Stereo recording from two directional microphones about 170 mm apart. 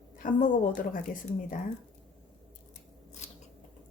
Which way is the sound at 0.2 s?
55° left (ahead or behind).